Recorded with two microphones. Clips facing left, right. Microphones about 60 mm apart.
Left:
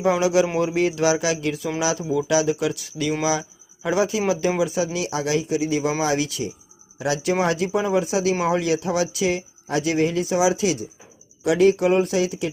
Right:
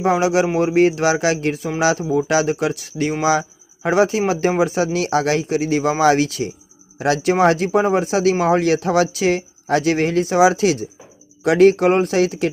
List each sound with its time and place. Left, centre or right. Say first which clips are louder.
0.1 s speech: right 2 dB; right